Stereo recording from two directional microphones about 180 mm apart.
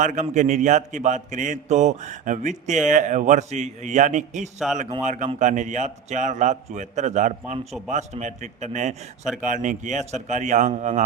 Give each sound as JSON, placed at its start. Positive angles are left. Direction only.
{"t": 0.0, "sound": "a man's voice", "side_deg": -45}